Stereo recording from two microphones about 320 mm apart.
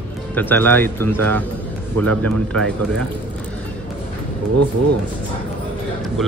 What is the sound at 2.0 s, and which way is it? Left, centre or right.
Speech, right.